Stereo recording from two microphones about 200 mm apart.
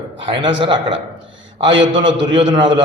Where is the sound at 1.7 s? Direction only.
65° right (ahead or behind).